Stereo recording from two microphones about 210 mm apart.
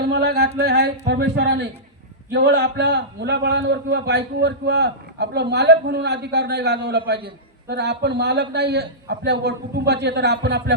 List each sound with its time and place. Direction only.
0.1 s a man's voice: 50° right (ahead or behind)